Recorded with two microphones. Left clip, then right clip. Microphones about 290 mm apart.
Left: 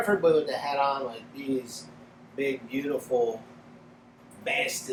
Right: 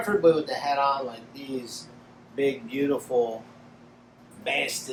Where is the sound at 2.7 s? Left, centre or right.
Centre.